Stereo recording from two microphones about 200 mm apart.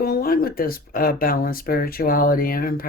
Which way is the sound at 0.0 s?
50° left (ahead or behind).